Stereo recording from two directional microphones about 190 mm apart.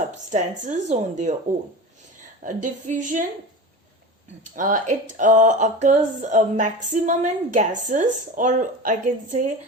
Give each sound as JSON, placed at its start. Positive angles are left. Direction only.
{"t": 0.1, "sound": "speech", "side_deg": -40}
{"t": 2.4, "sound": "a woman's voice", "side_deg": -40}
{"t": 4.5, "sound": "speech", "side_deg": -45}